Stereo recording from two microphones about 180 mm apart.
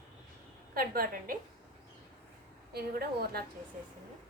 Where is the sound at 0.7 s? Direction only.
55° right (ahead or behind).